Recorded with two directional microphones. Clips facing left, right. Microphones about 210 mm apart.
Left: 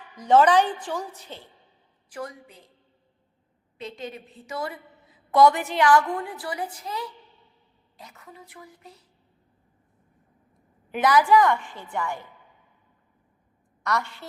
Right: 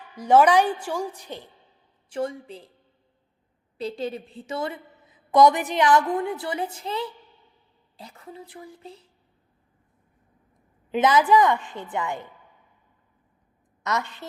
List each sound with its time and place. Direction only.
0.2 s a woman's voice: 10° right (ahead or behind)
2.0 s a woman's voice: 25° right (ahead or behind)
3.8 s a woman's voice: 35° right (ahead or behind)
10.9 s a woman's voice: 20° right (ahead or behind)
13.8 s a woman's voice: 20° right (ahead or behind)